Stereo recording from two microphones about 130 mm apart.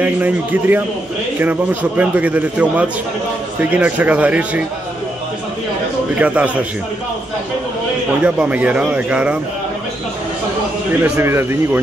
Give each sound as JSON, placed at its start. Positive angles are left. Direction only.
{"t": 0.0, "sound": "a man's voice", "side_deg": -15}
{"t": 6.1, "sound": "a man's voice", "side_deg": -10}
{"t": 8.2, "sound": "a man's voice", "side_deg": -10}
{"t": 11.0, "sound": "speech", "side_deg": -20}